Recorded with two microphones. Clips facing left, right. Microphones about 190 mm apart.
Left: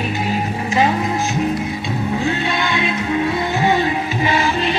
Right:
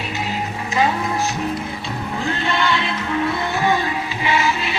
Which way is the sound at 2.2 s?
15° left (ahead or behind).